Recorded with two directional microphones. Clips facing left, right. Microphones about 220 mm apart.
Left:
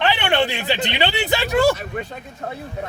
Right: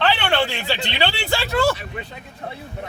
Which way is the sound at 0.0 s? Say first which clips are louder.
Left 1 dB; 15° left (ahead or behind).